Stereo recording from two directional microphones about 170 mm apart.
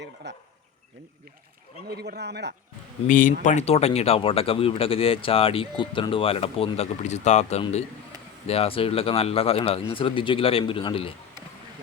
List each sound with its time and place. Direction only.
0.2 s speech: 90° right
1.9 s speech: 75° right (ahead or behind)
3.1 s speech: 50° left (ahead or behind); by 11.1 s 30° left (ahead or behind)